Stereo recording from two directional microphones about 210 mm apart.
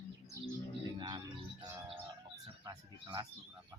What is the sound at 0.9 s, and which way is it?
Cricket, 20° right (ahead or behind).